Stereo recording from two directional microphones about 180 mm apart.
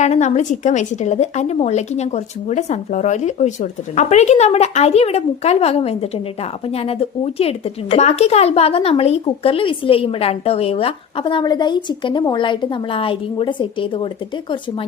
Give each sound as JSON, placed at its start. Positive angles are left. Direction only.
{"t": 0.0, "sound": "speech", "side_deg": 40}